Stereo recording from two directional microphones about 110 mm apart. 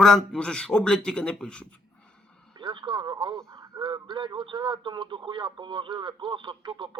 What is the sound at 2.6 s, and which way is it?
Speech, 45° right (ahead or behind).